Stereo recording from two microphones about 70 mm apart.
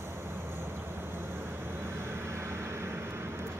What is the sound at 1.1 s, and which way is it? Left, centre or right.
Vehicle, right.